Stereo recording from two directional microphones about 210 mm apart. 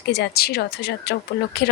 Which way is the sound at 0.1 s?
50° left (ahead or behind).